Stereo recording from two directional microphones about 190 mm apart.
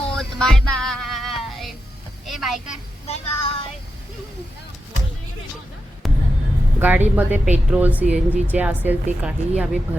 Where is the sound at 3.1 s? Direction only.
30° left (ahead or behind).